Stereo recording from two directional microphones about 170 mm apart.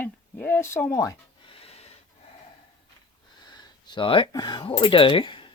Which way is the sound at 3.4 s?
25° left (ahead or behind).